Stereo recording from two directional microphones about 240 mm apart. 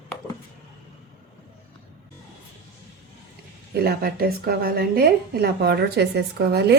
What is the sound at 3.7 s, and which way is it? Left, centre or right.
A woman's voice, right.